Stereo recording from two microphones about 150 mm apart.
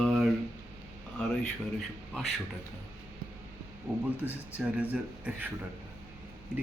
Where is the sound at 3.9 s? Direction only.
15° right (ahead or behind).